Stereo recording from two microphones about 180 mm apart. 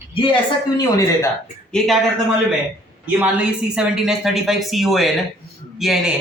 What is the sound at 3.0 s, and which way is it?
A woman's voice, 5° right (ahead or behind).